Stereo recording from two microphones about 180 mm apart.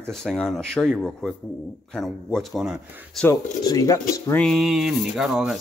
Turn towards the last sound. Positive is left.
turn(degrees=-5)  # may be behind; listen again after turning